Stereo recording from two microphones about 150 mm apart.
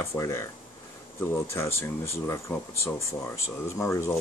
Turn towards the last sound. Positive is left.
turn(degrees=20)  # may be behind; listen again after turning